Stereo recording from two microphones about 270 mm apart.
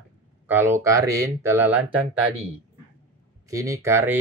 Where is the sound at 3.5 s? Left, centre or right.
Centre.